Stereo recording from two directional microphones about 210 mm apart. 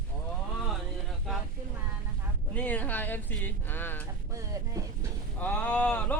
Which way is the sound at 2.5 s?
5° left (ahead or behind).